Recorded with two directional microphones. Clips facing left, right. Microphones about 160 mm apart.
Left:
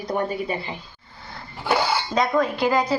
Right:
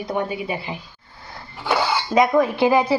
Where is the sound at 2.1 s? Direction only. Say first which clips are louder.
Right 6 dB; 20° right (ahead or behind).